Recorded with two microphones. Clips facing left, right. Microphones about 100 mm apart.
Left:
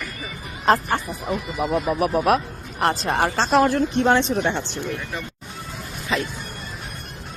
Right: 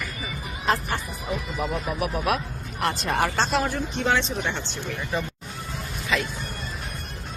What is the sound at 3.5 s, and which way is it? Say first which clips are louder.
Speech: left 8 dB; 80° left.